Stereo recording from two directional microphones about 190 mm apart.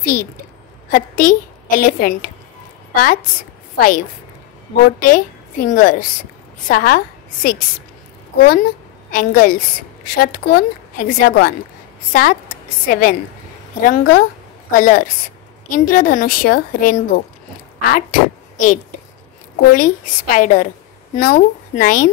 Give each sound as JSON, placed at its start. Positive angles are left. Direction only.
{"t": 0.0, "sound": "a woman's voice", "side_deg": 45}
{"t": 5.0, "sound": "a woman's voice", "side_deg": 45}
{"t": 9.1, "sound": "a woman's voice", "side_deg": 50}